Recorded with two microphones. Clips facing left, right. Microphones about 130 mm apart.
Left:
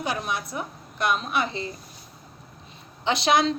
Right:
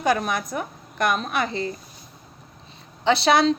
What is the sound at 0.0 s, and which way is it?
A woman's voice, 45° right (ahead or behind).